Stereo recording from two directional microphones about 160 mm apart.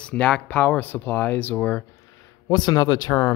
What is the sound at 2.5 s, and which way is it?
Speech, 25° left (ahead or behind).